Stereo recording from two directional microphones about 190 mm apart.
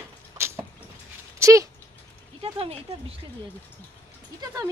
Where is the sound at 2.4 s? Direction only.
30° right (ahead or behind).